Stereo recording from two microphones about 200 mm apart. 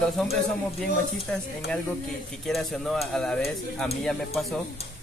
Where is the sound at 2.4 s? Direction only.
Centre (ahead or behind).